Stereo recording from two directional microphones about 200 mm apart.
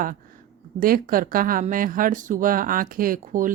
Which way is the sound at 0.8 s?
45° right (ahead or behind).